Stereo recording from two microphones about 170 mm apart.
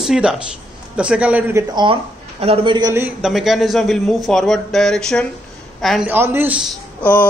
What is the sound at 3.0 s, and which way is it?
A man's voice, centre (ahead or behind).